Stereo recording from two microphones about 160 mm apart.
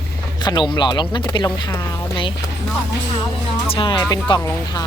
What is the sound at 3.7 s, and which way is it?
Speech, 30° left (ahead or behind).